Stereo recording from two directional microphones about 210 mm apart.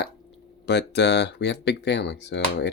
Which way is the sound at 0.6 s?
55° left (ahead or behind).